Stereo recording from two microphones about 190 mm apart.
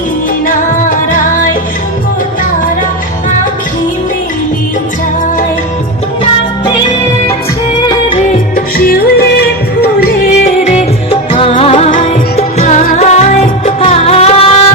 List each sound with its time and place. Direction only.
7.9 s music of bollywood: 30° left (ahead or behind)
8.5 s music: 50° left (ahead or behind)
10.4 s music: 35° left (ahead or behind)